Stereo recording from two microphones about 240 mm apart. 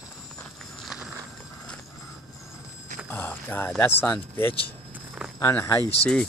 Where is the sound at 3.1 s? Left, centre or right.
Centre.